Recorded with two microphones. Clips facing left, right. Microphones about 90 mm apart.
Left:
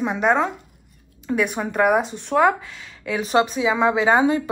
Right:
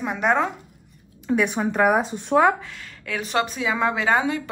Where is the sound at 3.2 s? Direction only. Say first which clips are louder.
Left 5 dB; 20° left (ahead or behind).